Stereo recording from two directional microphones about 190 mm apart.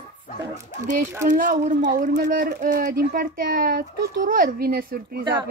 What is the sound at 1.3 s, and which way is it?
Speech, 45° right (ahead or behind).